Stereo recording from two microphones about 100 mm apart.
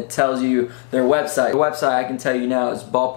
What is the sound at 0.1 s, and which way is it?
Speech, 15° left (ahead or behind).